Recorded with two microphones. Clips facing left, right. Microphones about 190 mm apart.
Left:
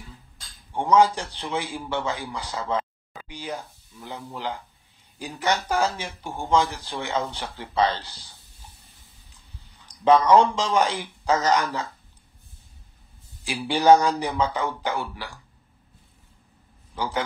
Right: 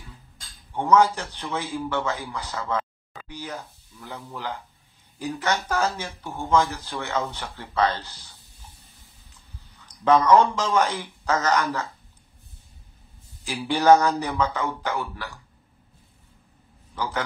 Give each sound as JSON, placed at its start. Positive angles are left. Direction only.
{"t": 0.8, "sound": "speech", "side_deg": 10}
{"t": 10.0, "sound": "speech", "side_deg": 15}
{"t": 13.7, "sound": "speech", "side_deg": 15}
{"t": 16.9, "sound": "a man's voice", "side_deg": 15}